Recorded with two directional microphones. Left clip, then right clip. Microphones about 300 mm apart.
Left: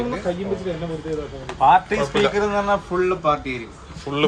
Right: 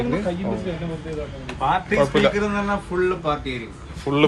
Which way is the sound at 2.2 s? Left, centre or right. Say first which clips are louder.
Left 2 dB; centre.